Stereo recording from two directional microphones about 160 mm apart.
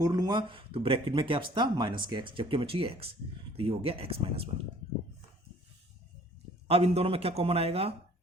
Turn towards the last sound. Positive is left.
turn(degrees=-40)  # may be behind; listen again after turning